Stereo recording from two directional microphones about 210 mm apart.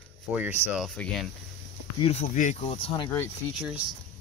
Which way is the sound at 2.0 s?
35° left (ahead or behind).